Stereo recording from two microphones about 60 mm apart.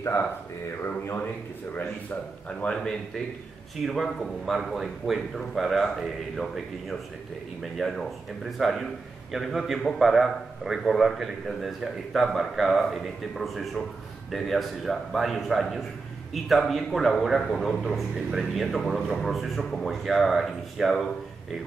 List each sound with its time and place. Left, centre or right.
0.8 s speech: left
2.6 s a man's voice: centre
7.8 s a man's voice: centre